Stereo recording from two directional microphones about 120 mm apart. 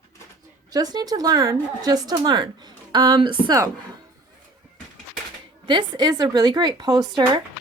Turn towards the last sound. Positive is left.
turn(degrees=-35)  # may be behind; listen again after turning